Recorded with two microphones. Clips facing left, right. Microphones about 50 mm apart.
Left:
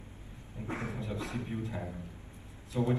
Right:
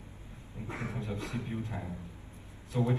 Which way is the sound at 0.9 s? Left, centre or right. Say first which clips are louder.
Even; right.